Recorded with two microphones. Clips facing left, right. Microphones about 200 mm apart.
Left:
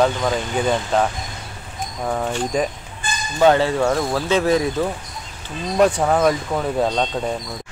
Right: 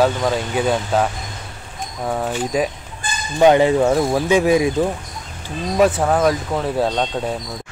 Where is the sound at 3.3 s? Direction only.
15° right (ahead or behind).